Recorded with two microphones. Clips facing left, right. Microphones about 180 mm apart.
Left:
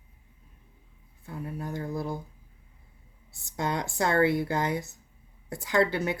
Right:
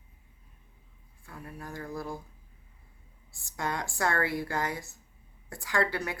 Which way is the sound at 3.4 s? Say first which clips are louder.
Left 4 dB; 20° left (ahead or behind).